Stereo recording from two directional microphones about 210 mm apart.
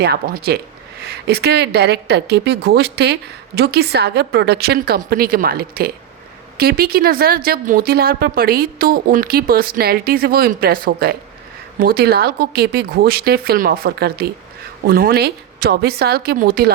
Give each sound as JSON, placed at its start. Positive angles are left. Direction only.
{"t": 0.0, "sound": "a woman's voice", "side_deg": -45}